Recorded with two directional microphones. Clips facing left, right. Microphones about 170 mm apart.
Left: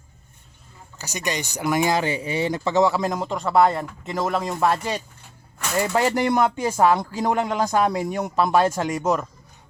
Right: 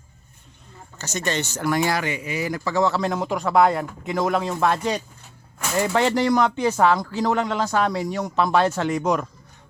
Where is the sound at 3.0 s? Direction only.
Centre (ahead or behind).